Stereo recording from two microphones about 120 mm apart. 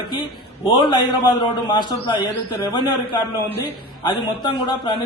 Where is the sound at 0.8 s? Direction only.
40° left (ahead or behind).